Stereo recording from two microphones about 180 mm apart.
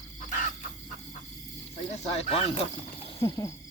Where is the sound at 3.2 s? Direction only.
15° left (ahead or behind).